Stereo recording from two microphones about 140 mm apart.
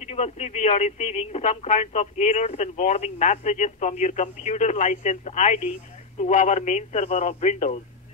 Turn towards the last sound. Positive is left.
turn(degrees=55)  # may be behind; listen again after turning